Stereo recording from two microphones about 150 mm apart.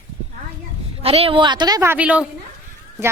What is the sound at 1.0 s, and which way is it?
Speech, 40° right (ahead or behind).